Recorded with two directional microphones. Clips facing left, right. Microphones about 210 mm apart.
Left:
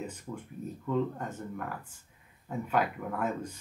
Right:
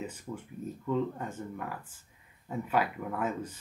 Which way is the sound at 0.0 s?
5° right (ahead or behind).